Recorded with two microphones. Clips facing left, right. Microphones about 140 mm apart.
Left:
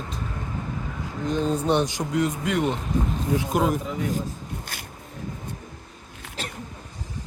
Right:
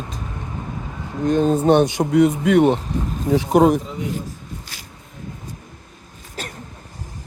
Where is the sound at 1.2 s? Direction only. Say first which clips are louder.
Right 8 dB; 55° right (ahead or behind); by 3.8 s 70° right (ahead or behind).